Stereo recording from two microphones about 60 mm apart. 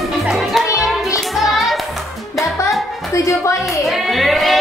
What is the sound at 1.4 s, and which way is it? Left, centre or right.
Music, centre.